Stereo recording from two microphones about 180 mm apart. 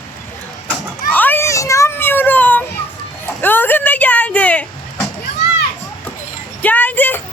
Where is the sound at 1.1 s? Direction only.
10° left (ahead or behind).